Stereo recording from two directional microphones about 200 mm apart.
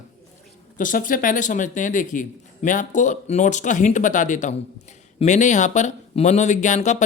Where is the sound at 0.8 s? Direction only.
40° left (ahead or behind).